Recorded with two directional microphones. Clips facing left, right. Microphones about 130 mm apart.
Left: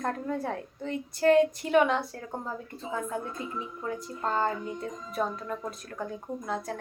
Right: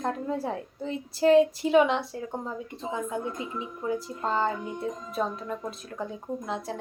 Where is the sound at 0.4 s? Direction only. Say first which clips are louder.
Right 2 dB; 5° right (ahead or behind).